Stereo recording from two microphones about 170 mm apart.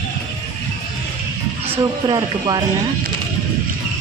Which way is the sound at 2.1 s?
25° right (ahead or behind).